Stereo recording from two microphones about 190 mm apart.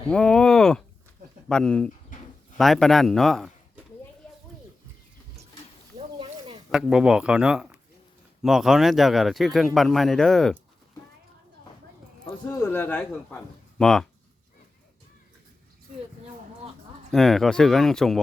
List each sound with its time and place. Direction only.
0.1 s speech: 5° left (ahead or behind)
2.1 s a sound: 45° left (ahead or behind)
2.6 s speech: centre (ahead or behind)
6.7 s speech: 5° right (ahead or behind)
12.2 s speech: 15° left (ahead or behind)
17.1 s speech: centre (ahead or behind)